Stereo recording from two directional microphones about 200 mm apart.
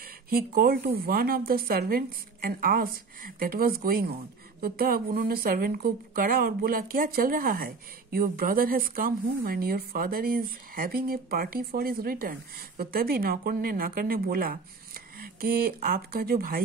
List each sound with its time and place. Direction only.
0.3 s a woman's voice: 45° right (ahead or behind)